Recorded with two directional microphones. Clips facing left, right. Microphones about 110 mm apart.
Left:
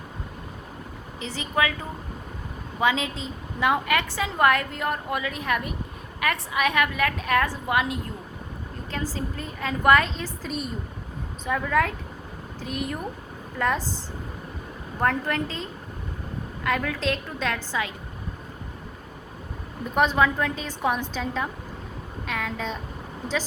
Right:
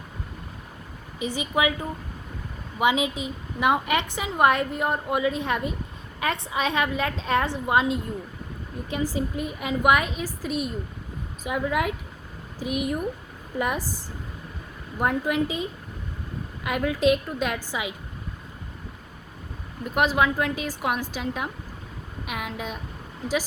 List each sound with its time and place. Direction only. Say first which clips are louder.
1.2 s a woman's voice: right 2 dB; 15° right (ahead or behind)
2.7 s a woman's voice: right 2 dB; 15° right (ahead or behind)
15.0 s a woman's voice: right 1 dB; 10° right (ahead or behind)
20.0 s a woman's voice: left 1 dB; 5° right (ahead or behind)